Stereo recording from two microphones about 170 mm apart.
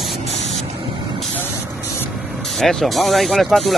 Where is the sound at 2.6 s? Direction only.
Centre (ahead or behind).